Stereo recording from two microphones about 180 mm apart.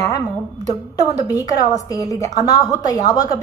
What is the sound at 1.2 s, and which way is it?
A woman's voice, 20° left (ahead or behind).